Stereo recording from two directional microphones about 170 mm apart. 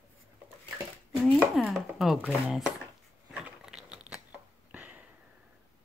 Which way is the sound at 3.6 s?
5° right (ahead or behind).